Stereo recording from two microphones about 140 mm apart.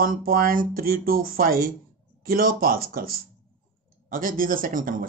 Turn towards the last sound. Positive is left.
turn(degrees=-75)  # may be behind; listen again after turning